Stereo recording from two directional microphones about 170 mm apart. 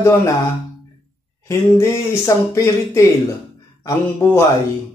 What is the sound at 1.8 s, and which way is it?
Speech, 20° left (ahead or behind).